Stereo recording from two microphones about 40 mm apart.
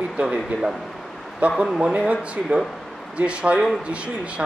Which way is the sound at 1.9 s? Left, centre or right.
Right.